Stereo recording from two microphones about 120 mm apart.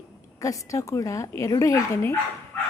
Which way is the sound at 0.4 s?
25° left (ahead or behind).